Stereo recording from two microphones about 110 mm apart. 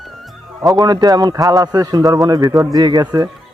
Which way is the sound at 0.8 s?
40° right (ahead or behind).